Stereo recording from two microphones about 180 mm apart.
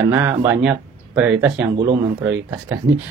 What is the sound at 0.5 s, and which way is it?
Speech, 5° right (ahead or behind).